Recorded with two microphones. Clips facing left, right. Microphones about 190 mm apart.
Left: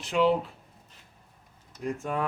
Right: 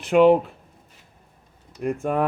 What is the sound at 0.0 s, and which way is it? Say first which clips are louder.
Speech: right 9 dB; 55° right (ahead or behind).